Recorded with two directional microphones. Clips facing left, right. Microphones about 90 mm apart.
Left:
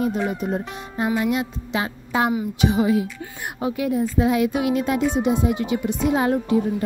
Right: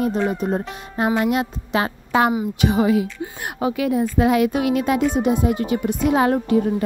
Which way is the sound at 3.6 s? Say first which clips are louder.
Right 2 dB; 90° right.